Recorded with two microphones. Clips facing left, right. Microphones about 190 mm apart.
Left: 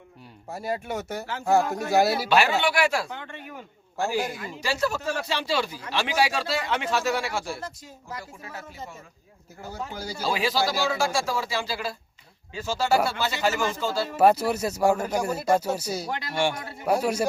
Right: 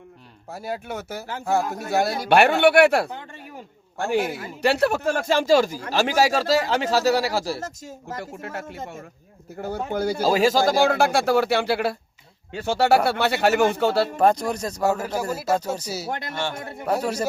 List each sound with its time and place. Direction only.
0.5 s speech: centre (ahead or behind)
2.3 s speech: 60° right (ahead or behind)
3.1 s speech: 35° right (ahead or behind)
4.3 s speech: 65° right (ahead or behind)
10.2 s speech: 45° right (ahead or behind); by 14.1 s 65° right (ahead or behind)
14.2 s speech: 5° left (ahead or behind)
16.0 s speech: 50° right (ahead or behind)
16.3 s speech: 15° left (ahead or behind)